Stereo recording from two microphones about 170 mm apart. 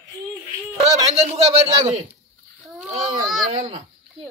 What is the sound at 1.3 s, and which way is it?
Speech, 40° right (ahead or behind).